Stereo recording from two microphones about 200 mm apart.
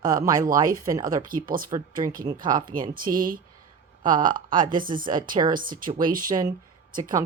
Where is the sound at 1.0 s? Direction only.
45° right (ahead or behind).